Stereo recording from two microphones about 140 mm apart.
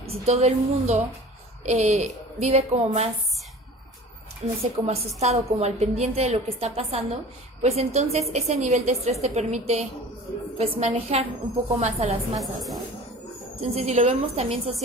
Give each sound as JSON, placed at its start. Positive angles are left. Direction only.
{"t": 0.0, "sound": "a woman's voice", "side_deg": -50}
{"t": 4.6, "sound": "a woman's voice", "side_deg": -50}
{"t": 12.4, "sound": "a woman's voice", "side_deg": 0}
{"t": 13.6, "sound": "a woman's voice", "side_deg": -50}